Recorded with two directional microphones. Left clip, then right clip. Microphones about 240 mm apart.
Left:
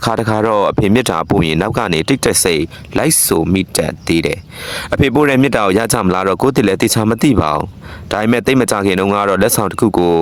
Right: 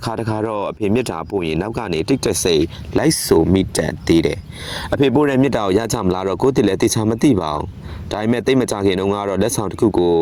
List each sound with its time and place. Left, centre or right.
0.0 s speech: left